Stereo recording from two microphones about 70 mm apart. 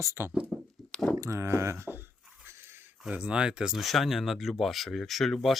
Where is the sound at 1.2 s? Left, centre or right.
Right.